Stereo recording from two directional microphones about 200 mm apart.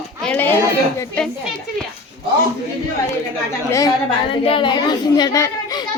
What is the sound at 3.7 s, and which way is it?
A child's voice, 15° left (ahead or behind).